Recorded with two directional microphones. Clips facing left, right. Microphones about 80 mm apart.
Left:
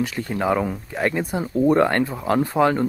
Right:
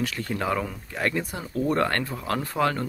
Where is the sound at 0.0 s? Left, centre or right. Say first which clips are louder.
Left 5 dB; centre.